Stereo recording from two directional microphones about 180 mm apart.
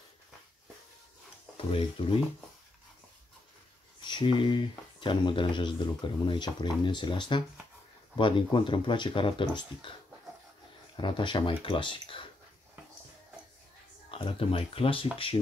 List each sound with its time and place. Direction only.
1.6 s speech: 30° left (ahead or behind)
4.0 s speech: 25° left (ahead or behind)
11.0 s speech: 25° left (ahead or behind)
14.1 s speech: 30° left (ahead or behind)